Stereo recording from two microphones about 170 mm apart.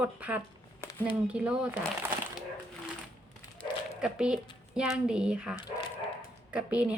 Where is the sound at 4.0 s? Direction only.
5° right (ahead or behind).